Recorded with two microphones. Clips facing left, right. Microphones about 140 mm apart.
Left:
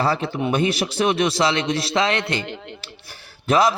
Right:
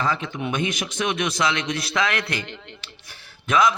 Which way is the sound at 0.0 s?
35° left (ahead or behind).